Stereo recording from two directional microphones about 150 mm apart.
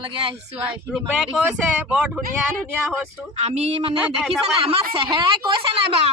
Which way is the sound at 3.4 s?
45° right (ahead or behind).